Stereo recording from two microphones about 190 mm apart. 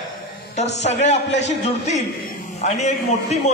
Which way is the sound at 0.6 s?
35° left (ahead or behind).